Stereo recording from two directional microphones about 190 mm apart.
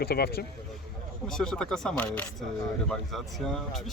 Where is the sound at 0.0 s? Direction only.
55° left (ahead or behind).